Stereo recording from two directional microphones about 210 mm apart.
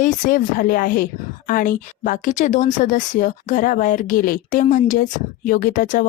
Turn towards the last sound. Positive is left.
turn(degrees=40)  # may be behind; listen again after turning